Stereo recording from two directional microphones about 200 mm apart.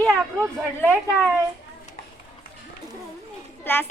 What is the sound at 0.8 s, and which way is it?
Speech, 10° left (ahead or behind).